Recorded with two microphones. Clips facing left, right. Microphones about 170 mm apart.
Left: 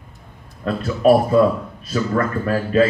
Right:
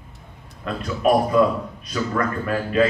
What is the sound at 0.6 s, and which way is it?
Speech, 30° left (ahead or behind).